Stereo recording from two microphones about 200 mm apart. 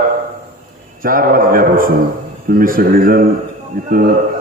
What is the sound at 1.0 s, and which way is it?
A man's voice, 45° right (ahead or behind).